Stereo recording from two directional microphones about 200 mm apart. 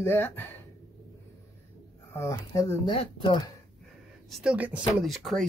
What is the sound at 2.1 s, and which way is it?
Speech, 15° left (ahead or behind).